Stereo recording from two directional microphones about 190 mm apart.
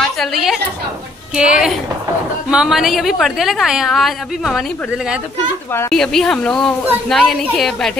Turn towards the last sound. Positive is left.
turn(degrees=0)  # may be behind; listen again after turning